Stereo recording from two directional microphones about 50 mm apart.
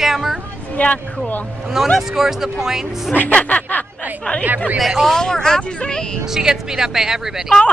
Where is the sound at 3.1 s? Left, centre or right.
Left.